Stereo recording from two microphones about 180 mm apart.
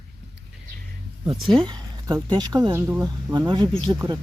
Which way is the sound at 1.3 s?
25° right (ahead or behind).